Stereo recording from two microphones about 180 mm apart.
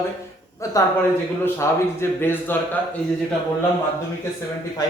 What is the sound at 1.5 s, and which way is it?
Speech, 15° left (ahead or behind).